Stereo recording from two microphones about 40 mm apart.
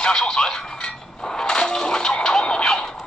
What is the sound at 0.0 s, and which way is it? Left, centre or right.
Speech, left.